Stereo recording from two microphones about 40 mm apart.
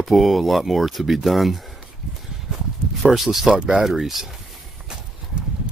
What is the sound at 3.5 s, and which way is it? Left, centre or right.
Speech, right.